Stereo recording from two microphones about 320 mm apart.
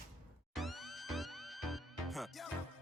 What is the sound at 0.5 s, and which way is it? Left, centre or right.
Music, centre.